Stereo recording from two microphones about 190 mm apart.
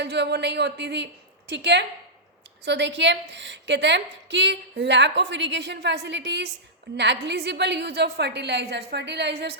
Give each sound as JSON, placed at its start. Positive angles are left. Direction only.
{"t": 0.0, "sound": "a woman's voice", "side_deg": -60}